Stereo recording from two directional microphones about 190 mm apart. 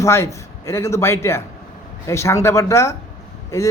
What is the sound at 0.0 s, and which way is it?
A man's voice, 15° left (ahead or behind).